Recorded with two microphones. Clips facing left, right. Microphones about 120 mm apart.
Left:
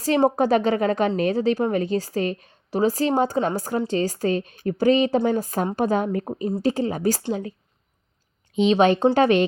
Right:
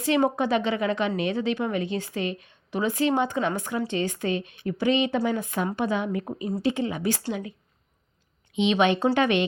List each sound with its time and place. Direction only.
0.0 s a woman's voice: 35° left (ahead or behind)
7.2 s a woman's voice: 25° left (ahead or behind)
8.5 s a woman's voice: 35° left (ahead or behind)